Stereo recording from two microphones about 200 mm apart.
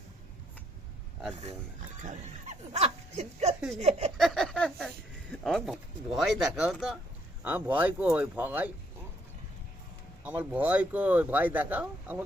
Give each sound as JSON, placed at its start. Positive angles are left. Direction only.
{"t": 2.0, "sound": "speech", "side_deg": -35}
{"t": 4.2, "sound": "a sound", "side_deg": 0}
{"t": 5.3, "sound": "speech", "side_deg": 5}
{"t": 10.2, "sound": "speech", "side_deg": -10}